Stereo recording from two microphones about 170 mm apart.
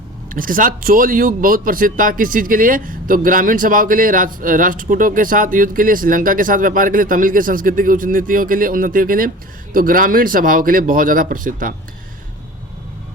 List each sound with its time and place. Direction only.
0.3 s a man's voice: 55° right (ahead or behind)